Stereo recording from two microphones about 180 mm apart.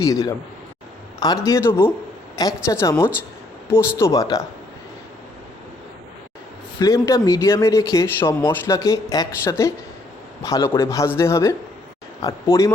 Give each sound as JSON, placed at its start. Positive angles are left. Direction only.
{"t": 0.0, "sound": "a woman's voice", "side_deg": 20}
{"t": 6.7, "sound": "speech", "side_deg": 15}